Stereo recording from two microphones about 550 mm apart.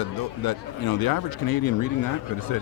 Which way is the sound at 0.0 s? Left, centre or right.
Left.